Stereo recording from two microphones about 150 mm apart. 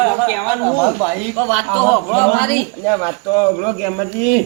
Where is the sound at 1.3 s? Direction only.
15° left (ahead or behind).